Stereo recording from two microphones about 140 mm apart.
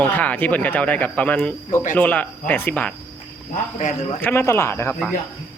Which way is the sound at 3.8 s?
60° left (ahead or behind).